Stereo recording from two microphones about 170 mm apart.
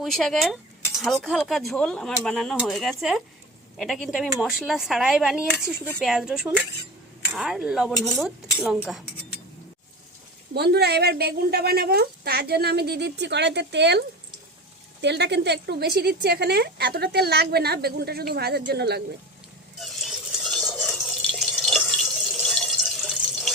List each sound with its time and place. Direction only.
0.0 s speech: centre (ahead or behind)
10.5 s a woman's voice: 75° right (ahead or behind)
15.0 s a woman's voice: 85° right
19.8 s a sound: centre (ahead or behind)